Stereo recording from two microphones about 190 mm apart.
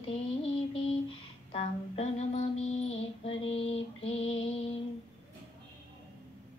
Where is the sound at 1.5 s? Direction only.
35° left (ahead or behind).